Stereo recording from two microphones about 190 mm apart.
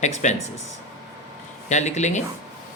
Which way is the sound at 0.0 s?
40° left (ahead or behind).